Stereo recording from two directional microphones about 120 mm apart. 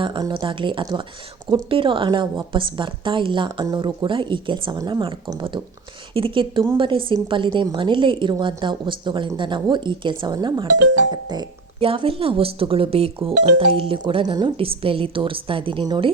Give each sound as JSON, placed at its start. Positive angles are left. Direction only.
{"t": 0.0, "sound": "a woman's voice", "side_deg": -40}
{"t": 11.8, "sound": "a woman's voice", "side_deg": -50}